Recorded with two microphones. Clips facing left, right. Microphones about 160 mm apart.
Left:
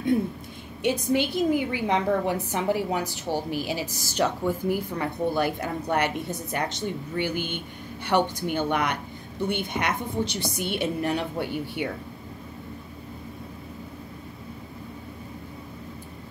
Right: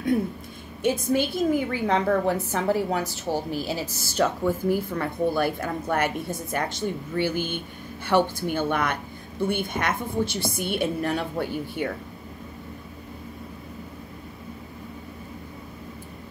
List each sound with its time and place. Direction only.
1.1 s a woman's voice: 20° left (ahead or behind)
11.4 s speech: 40° right (ahead or behind)